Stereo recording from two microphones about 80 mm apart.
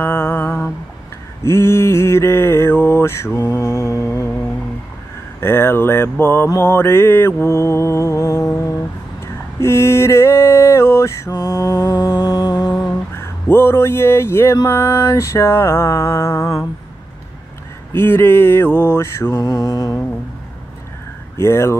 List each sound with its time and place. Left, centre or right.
0.0 s a sound: left
1.4 s mantra: left
5.4 s a sound: left
6.5 s mantra: left
12.2 s music: left
13.1 s speech: left
14.6 s mantra: left
17.9 s mantra: left
21.4 s mantra: left